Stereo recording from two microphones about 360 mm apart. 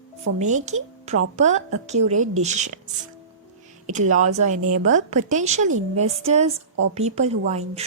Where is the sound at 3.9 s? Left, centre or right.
Centre.